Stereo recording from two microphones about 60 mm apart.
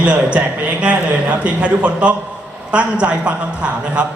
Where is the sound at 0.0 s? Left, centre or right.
Right.